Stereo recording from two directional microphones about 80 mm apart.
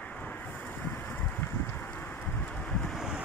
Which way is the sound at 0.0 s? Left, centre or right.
Left.